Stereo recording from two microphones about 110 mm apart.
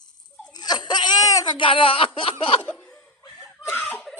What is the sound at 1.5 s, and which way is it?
Speech, 50° left (ahead or behind).